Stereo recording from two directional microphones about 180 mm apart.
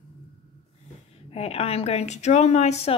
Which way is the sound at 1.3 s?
35° left (ahead or behind).